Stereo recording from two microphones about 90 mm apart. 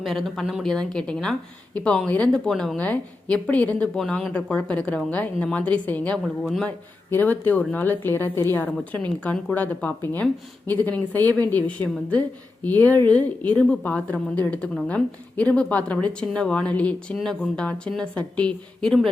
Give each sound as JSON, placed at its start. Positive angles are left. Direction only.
{"t": 0.0, "sound": "speech", "side_deg": 0}
{"t": 2.3, "sound": "speech", "side_deg": 5}
{"t": 2.7, "sound": "speech", "side_deg": 15}
{"t": 3.9, "sound": "speech", "side_deg": 5}
{"t": 6.2, "sound": "speech", "side_deg": 0}
{"t": 6.7, "sound": "a woman's voice", "side_deg": 20}